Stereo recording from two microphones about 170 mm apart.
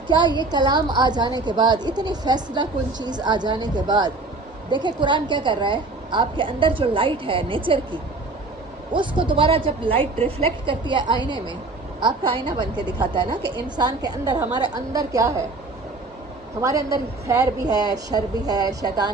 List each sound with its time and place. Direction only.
0.1 s a woman's voice: 25° right (ahead or behind)
8.9 s a woman's voice: 30° right (ahead or behind)
16.6 s a woman's voice: 20° right (ahead or behind)